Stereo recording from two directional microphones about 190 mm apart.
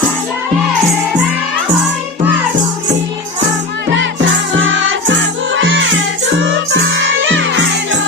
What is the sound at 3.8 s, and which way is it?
Music, 80° right.